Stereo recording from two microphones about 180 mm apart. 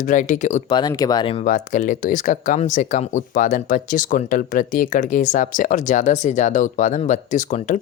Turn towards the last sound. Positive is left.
turn(degrees=45)  # may be behind; listen again after turning